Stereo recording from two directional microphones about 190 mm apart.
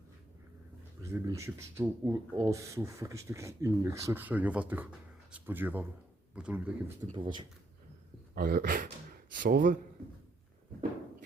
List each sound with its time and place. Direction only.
1.0 s speech: 15° right (ahead or behind)
7.1 s speech: 25° right (ahead or behind)
8.4 s speech: 50° right (ahead or behind)